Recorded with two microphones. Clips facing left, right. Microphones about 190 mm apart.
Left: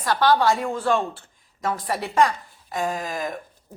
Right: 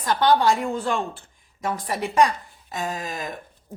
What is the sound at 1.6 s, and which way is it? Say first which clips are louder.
Speech: even; 15° right (ahead or behind).